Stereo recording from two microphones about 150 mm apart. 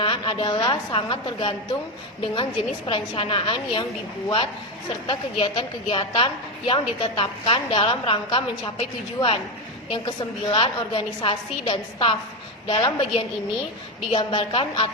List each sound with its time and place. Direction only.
0.0 s a woman's voice: 35° left (ahead or behind)
5.0 s a woman's voice: 35° left (ahead or behind)
14.1 s a woman's voice: 30° left (ahead or behind)